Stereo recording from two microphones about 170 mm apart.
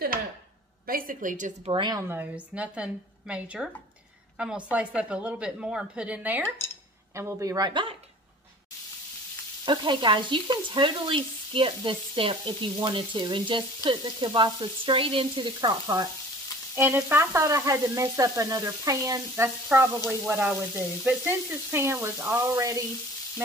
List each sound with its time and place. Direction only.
0.8 s a woman's voice: 55° right (ahead or behind)
1.7 s frying: 25° right (ahead or behind)
2.0 s frying: 10° right (ahead or behind); by 7.9 s 25° right (ahead or behind)
9.7 s frying: 30° right (ahead or behind)
16.7 s frying: 15° right (ahead or behind)